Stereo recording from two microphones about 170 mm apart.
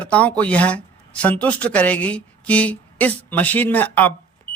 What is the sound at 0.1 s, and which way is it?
A woman's voice, 10° left (ahead or behind).